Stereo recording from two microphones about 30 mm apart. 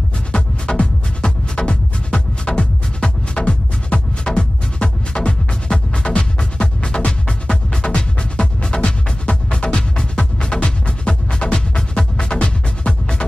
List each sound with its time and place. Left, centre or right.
0.3 s music: left
3.3 s music: left